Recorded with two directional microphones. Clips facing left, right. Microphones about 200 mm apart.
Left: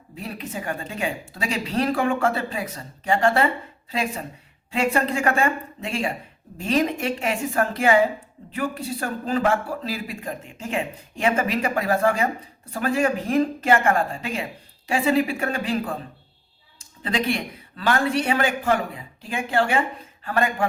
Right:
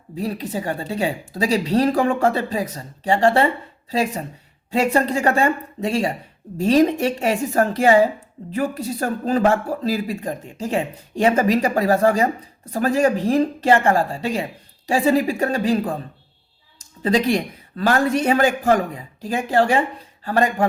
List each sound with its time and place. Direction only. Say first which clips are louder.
0.2 s speech: right 7 dB; 35° right (ahead or behind)
17.0 s speech: right 6 dB; 35° right (ahead or behind)